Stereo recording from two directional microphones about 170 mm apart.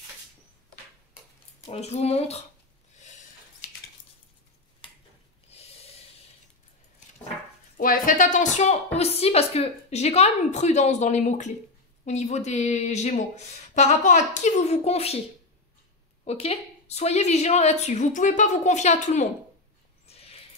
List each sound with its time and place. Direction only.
1.7 s a woman's voice: 40° left (ahead or behind)
5.5 s snort: 35° left (ahead or behind)
7.7 s a woman's voice: 55° left (ahead or behind); by 15.1 s 35° left (ahead or behind)
16.3 s a woman's voice: 40° left (ahead or behind)
20.1 s a sound: 35° left (ahead or behind)